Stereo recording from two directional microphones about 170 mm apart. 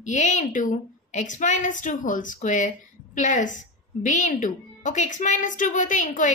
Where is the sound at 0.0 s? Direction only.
45° left (ahead or behind).